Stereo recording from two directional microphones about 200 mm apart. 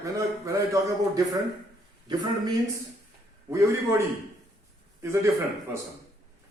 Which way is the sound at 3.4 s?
15° right (ahead or behind).